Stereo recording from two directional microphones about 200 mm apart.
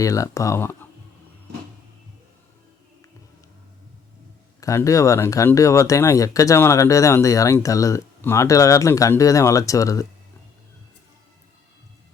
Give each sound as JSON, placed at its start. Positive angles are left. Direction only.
{"t": 0.0, "sound": "speech", "side_deg": 15}
{"t": 4.6, "sound": "speech", "side_deg": 15}